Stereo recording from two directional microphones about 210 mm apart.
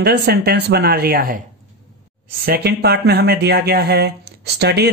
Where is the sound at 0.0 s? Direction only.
50° right (ahead or behind).